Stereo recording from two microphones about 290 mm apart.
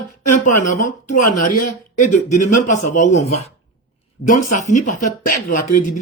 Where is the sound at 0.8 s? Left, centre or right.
Left.